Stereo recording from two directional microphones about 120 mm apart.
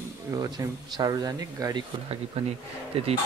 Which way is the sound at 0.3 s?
30° right (ahead or behind).